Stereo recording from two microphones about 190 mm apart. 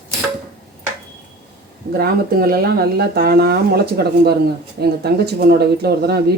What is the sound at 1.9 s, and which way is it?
Speech, 55° right (ahead or behind).